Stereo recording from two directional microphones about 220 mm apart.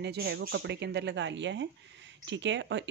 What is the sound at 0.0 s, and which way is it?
Speech, 50° right (ahead or behind).